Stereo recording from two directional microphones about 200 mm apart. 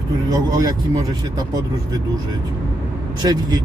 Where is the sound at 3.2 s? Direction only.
20° right (ahead or behind).